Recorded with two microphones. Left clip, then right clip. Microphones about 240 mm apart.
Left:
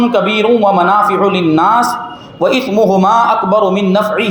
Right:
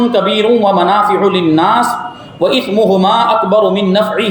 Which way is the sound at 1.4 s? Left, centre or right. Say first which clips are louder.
Even; centre.